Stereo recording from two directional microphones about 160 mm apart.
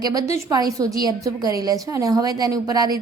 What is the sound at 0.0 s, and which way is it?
A woman's voice, 25° right (ahead or behind).